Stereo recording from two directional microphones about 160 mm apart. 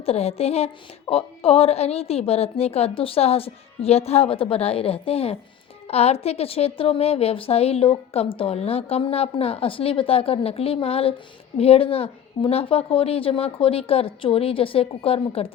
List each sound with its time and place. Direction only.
0.0 s a woman's voice: 40° left (ahead or behind)